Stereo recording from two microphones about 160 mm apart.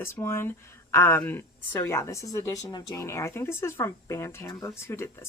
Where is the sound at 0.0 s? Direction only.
15° left (ahead or behind).